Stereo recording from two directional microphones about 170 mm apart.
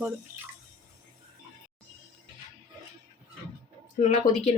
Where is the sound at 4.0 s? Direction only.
40° left (ahead or behind).